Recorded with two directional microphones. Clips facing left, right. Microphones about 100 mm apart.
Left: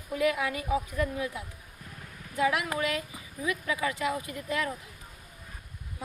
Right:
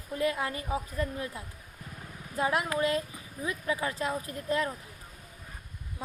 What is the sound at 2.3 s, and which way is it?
Speech, 40° right (ahead or behind).